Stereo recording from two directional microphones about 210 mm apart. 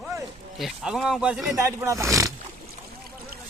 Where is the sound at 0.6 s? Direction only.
Centre (ahead or behind).